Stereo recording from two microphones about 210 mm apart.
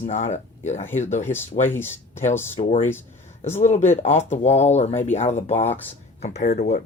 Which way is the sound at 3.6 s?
35° left (ahead or behind).